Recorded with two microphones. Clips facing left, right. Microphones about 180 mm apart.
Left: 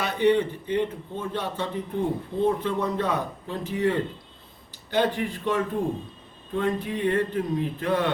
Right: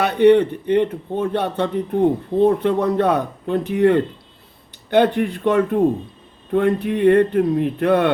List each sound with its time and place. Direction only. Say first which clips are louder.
0.0 s a man's voice: right 9 dB; 65° right (ahead or behind)